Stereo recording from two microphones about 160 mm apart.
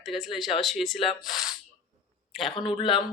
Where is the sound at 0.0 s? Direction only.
Centre (ahead or behind).